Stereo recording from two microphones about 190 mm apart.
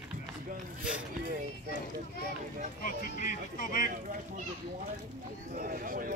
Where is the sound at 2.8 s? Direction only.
45° left (ahead or behind).